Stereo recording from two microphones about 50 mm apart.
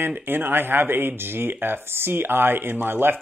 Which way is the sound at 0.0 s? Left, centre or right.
Right.